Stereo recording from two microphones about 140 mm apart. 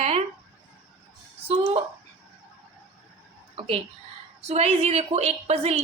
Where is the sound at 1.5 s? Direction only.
45° right (ahead or behind).